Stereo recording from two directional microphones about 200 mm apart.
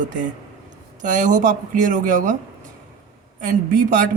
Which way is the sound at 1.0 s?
40° right (ahead or behind).